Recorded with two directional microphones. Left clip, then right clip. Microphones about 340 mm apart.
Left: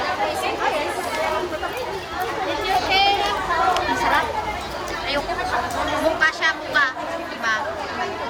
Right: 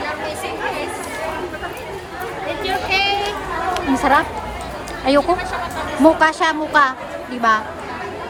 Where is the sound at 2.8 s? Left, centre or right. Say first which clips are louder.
Even; centre.